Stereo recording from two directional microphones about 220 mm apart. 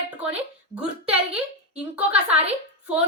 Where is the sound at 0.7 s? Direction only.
5° right (ahead or behind).